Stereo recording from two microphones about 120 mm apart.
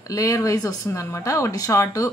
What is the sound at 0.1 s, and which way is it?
Speech, 30° left (ahead or behind).